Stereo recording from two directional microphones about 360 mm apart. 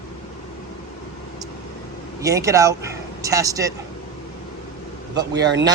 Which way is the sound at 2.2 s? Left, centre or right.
Centre.